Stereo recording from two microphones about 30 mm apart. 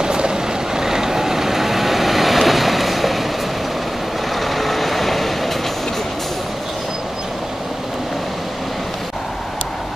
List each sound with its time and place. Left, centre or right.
0.0 s vehicle: right; by 3.3 s centre
4.4 s vehicle: centre